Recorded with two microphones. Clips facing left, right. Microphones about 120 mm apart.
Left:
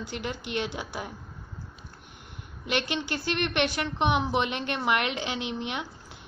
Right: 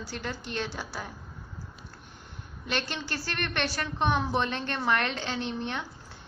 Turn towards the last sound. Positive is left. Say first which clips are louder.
# even
turn(degrees=15)  # may be behind; listen again after turning